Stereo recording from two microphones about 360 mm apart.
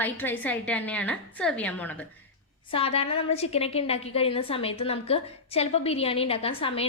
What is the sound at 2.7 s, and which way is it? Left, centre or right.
A woman's voice, centre.